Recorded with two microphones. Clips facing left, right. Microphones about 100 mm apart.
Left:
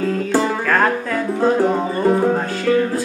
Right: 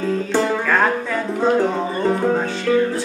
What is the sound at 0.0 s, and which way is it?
Music, 5° left (ahead or behind).